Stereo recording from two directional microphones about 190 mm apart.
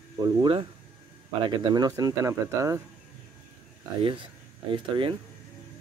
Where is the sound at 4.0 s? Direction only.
25° right (ahead or behind).